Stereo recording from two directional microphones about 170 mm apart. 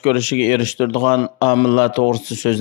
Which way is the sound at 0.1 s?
40° left (ahead or behind).